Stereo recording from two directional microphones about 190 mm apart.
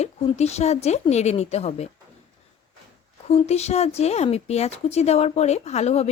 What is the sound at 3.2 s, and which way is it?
Speech, 35° left (ahead or behind).